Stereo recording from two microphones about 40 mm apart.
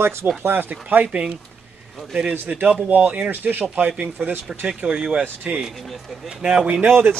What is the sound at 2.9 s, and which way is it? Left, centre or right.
Speech, right.